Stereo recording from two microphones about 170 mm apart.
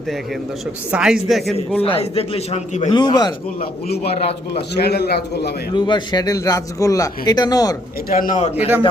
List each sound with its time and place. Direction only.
0.9 s speech: 5° right (ahead or behind)
1.8 s a man's voice: 35° left (ahead or behind)
2.9 s a man's voice: 25° left (ahead or behind)
3.6 s a man's voice: 65° left (ahead or behind)
5.7 s a man's voice: 25° left (ahead or behind)
8.2 s a man's voice: 45° left (ahead or behind)
8.5 s a man's voice: 10° right (ahead or behind)